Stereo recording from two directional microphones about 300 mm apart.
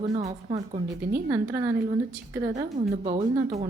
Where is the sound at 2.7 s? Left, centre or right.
Right.